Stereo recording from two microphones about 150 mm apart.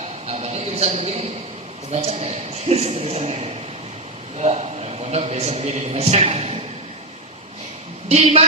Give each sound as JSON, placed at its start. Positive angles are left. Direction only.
{"t": 0.3, "sound": "a sound", "side_deg": -45}
{"t": 1.9, "sound": "a man's voice", "side_deg": -45}
{"t": 8.1, "sound": "a man's voice", "side_deg": -45}